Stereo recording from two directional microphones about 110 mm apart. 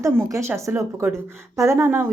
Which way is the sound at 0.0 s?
25° right (ahead or behind).